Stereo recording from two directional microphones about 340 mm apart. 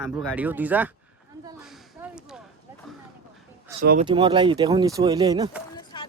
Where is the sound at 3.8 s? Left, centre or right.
Centre.